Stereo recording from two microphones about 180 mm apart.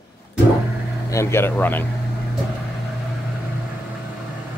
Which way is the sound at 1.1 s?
15° left (ahead or behind).